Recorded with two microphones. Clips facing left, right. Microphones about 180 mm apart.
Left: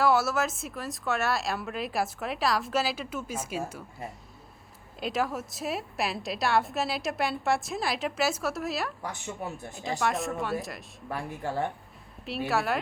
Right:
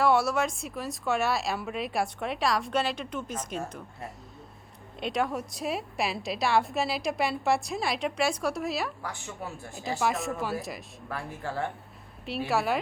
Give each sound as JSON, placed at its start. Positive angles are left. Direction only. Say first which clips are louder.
{"t": 0.0, "sound": "speech", "louder": "right 1 dB", "side_deg": 0}
{"t": 9.0, "sound": "a woman's voice", "louder": "left 2 dB", "side_deg": 20}
{"t": 10.0, "sound": "speech", "louder": "even", "side_deg": 0}
{"t": 11.1, "sound": "speech", "louder": "left 2 dB", "side_deg": 15}
{"t": 12.2, "sound": "speech", "louder": "right 1 dB", "side_deg": 0}